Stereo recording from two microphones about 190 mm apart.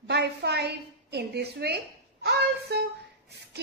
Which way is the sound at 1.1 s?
60° right (ahead or behind).